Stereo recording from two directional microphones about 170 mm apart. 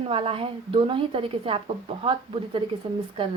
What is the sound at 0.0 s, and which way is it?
A woman's voice, 35° right (ahead or behind).